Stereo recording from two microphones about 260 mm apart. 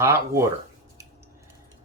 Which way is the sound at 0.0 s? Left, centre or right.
Centre.